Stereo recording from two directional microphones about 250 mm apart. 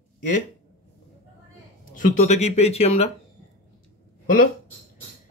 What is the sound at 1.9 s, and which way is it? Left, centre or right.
Speech, left.